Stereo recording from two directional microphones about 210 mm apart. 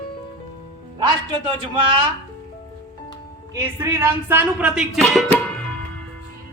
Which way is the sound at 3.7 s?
10° right (ahead or behind).